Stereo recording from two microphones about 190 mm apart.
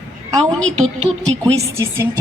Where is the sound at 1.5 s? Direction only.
15° right (ahead or behind).